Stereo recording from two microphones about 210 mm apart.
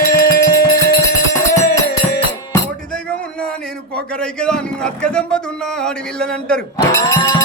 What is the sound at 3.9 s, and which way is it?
A man's voice, 5° left (ahead or behind).